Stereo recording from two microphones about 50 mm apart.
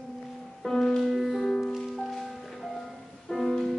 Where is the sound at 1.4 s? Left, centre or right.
Centre.